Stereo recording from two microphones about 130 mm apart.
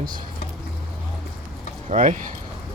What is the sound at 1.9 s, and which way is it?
Speech, 75° right (ahead or behind).